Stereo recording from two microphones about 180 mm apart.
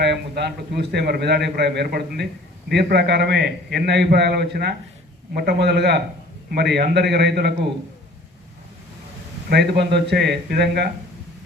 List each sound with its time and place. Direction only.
0.0 s a man's voice: 70° right (ahead or behind)
9.5 s speech: 65° right (ahead or behind)